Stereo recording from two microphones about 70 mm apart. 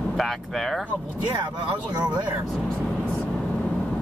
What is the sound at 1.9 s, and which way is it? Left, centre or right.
Speech, right.